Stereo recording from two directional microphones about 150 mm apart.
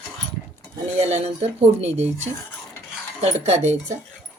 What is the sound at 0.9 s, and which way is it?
Speech, 45° right (ahead or behind).